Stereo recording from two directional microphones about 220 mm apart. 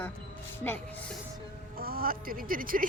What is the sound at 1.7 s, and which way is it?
Speech, 45° right (ahead or behind).